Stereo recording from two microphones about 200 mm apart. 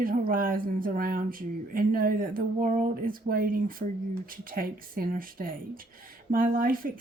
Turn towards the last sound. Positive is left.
turn(degrees=-45)  # may be behind; listen again after turning